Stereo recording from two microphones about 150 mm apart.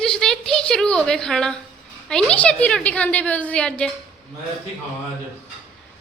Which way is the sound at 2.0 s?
5° left (ahead or behind).